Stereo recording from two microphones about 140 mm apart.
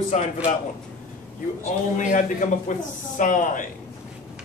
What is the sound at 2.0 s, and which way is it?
Speech, 65° left (ahead or behind).